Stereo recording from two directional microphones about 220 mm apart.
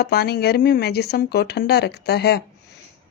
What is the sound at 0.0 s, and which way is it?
Speech, 45° left (ahead or behind).